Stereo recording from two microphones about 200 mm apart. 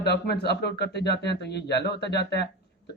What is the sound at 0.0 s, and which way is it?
Speech, 55° left (ahead or behind).